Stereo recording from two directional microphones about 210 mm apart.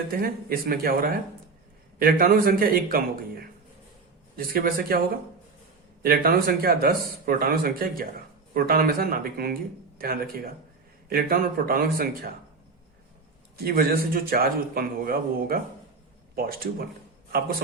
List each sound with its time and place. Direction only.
0.1 s speech: 45° right (ahead or behind)
13.6 s speech: 45° right (ahead or behind)